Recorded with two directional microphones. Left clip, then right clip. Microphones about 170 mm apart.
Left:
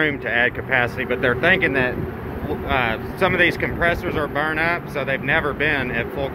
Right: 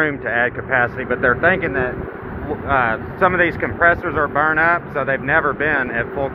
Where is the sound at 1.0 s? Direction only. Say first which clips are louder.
Right 2 dB; 35° right (ahead or behind).